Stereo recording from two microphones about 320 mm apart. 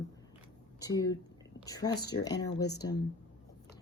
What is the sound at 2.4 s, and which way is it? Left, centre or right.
Speech, left.